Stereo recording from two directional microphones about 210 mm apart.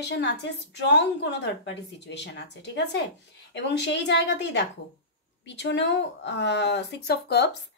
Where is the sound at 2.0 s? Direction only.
55° left (ahead or behind).